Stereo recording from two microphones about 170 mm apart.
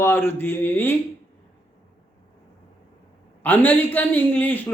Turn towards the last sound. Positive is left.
turn(degrees=10)  # may be behind; listen again after turning